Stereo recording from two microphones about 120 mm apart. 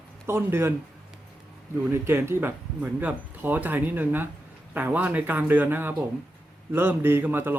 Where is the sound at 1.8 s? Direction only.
20° right (ahead or behind).